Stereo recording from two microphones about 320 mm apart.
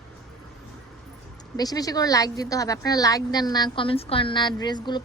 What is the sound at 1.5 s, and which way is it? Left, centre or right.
Speech, centre.